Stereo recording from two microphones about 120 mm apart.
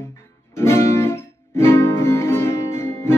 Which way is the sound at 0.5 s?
20° left (ahead or behind).